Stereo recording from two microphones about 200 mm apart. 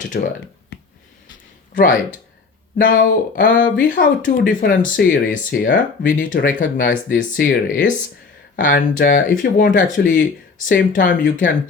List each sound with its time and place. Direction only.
0.1 s speech: 45° left (ahead or behind)
0.7 s a sound: 55° left (ahead or behind)
1.7 s speech: 45° left (ahead or behind)